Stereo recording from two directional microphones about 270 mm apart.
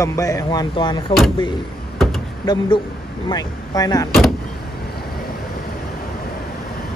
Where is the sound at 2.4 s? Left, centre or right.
Centre.